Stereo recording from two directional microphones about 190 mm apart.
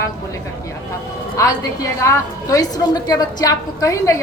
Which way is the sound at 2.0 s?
15° left (ahead or behind).